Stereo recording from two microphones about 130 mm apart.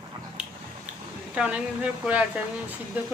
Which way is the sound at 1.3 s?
10° right (ahead or behind).